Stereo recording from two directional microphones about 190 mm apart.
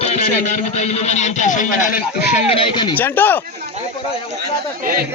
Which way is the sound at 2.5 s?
25° left (ahead or behind).